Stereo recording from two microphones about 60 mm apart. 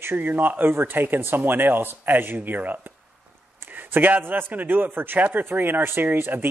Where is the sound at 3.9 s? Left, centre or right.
Right.